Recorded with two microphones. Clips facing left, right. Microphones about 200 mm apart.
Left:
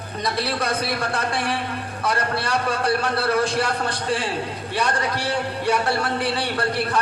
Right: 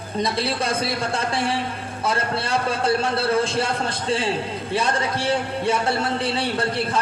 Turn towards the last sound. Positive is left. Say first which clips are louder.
# even
turn(degrees=-25)  # may be behind; listen again after turning